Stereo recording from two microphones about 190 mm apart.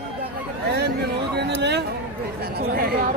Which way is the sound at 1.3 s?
60° right (ahead or behind).